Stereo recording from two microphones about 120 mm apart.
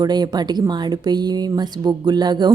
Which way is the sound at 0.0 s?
35° right (ahead or behind).